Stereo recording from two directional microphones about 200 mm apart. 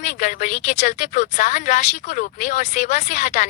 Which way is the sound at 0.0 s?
40° left (ahead or behind).